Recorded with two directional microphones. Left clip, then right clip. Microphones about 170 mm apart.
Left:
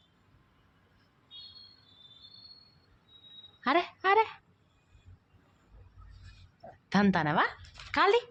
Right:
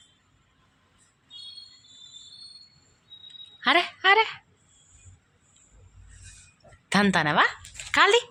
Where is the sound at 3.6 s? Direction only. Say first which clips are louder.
Right 6 dB; 5° left (ahead or behind).